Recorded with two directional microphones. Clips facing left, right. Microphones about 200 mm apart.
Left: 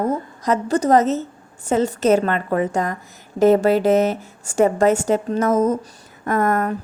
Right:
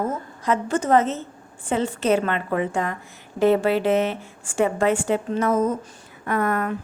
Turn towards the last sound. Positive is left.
turn(degrees=40)  # may be behind; listen again after turning